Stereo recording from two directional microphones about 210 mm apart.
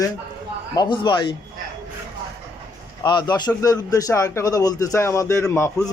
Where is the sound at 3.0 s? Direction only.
20° left (ahead or behind).